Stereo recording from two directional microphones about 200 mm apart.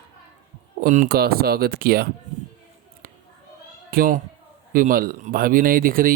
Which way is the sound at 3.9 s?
45° right (ahead or behind).